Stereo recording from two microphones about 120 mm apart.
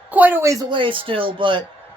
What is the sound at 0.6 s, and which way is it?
Speech, 40° right (ahead or behind).